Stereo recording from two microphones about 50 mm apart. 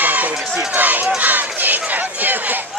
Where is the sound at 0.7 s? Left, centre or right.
Right.